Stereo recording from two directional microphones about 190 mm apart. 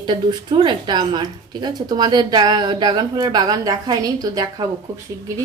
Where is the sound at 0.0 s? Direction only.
25° right (ahead or behind).